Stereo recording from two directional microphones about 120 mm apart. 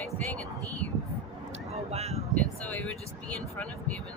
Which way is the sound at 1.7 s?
60° right (ahead or behind).